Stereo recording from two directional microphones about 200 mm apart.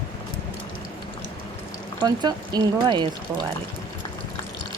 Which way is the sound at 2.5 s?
20° right (ahead or behind).